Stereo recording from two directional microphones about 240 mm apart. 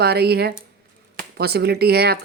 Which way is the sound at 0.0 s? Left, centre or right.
Right.